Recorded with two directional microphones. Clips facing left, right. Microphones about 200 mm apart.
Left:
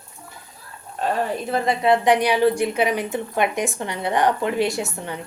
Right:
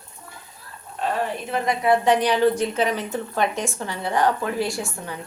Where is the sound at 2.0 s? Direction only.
10° left (ahead or behind).